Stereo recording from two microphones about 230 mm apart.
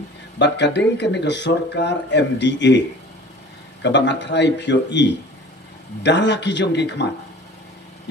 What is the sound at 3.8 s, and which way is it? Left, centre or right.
A man's voice, left.